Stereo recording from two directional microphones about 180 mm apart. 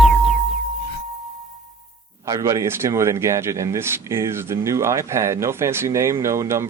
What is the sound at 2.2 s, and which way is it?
A man's voice, 20° right (ahead or behind).